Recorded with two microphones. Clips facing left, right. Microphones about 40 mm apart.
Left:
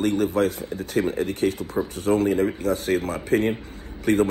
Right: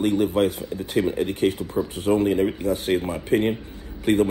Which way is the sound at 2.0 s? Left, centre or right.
Left.